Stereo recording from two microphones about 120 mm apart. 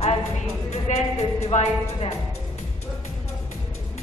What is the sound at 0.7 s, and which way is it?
Speech, 60° left (ahead or behind).